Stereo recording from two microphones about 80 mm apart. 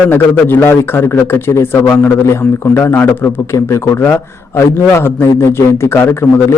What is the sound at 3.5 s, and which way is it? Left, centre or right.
Speech, left.